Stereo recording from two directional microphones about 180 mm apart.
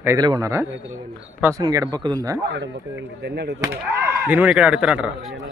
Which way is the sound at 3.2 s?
65° right (ahead or behind).